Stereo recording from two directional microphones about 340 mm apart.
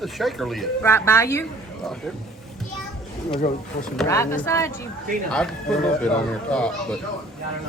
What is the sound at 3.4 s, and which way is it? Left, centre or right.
Speech, left.